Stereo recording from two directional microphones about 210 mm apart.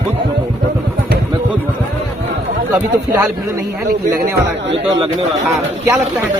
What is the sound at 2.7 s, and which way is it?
Speech, 5° right (ahead or behind).